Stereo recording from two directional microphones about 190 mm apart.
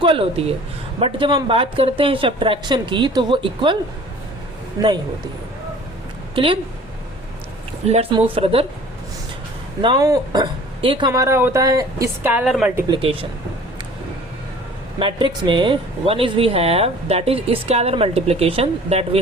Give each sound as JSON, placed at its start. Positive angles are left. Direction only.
{"t": 0.0, "sound": "a woman's voice", "side_deg": -30}
{"t": 6.3, "sound": "speech", "side_deg": -25}
{"t": 7.9, "sound": "speech", "side_deg": -30}
{"t": 9.8, "sound": "speech", "side_deg": -20}
{"t": 13.0, "sound": "a woman's voice", "side_deg": -30}
{"t": 14.9, "sound": "speech", "side_deg": -25}